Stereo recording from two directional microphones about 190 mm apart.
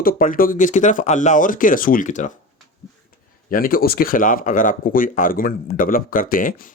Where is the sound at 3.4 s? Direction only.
50° left (ahead or behind).